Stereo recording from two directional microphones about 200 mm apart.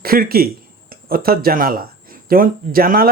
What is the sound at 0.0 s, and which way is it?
Speech, 45° right (ahead or behind).